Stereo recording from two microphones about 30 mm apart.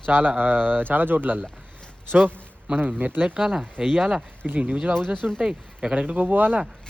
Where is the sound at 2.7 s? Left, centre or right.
Right.